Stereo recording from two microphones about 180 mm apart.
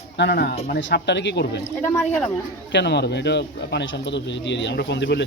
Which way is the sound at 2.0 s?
10° left (ahead or behind).